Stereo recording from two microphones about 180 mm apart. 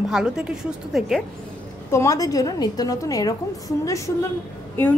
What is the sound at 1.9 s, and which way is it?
A woman's voice, 15° left (ahead or behind).